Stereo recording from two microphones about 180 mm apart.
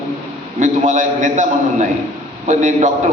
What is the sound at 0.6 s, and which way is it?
A man's voice, 45° right (ahead or behind).